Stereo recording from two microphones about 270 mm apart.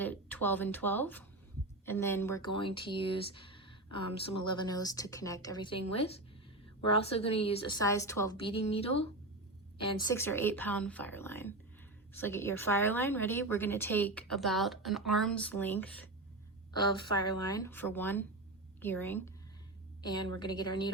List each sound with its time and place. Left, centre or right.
0.0 s a woman's voice: centre
16.7 s speech: centre